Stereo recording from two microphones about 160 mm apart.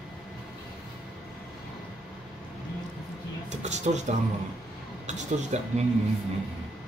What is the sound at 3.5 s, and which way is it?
Speech, 45° right (ahead or behind).